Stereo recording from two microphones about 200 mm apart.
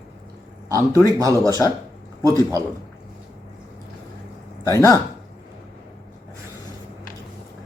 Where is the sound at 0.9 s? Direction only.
15° left (ahead or behind).